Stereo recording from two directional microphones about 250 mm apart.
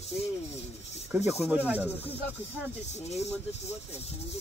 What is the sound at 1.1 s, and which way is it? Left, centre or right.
Speech, centre.